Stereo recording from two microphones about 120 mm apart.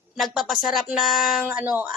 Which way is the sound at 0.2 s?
Centre (ahead or behind).